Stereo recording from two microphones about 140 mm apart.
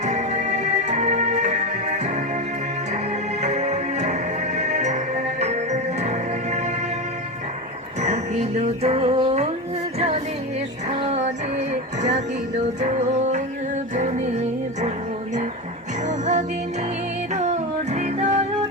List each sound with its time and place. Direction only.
0.0 s music: 55° right (ahead or behind)
3.4 s music: 55° right (ahead or behind)
8.0 s music: 50° right (ahead or behind)
10.8 s music: 45° right (ahead or behind)
16.0 s music: 60° right (ahead or behind)